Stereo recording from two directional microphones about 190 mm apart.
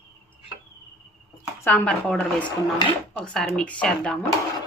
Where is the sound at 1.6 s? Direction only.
10° left (ahead or behind).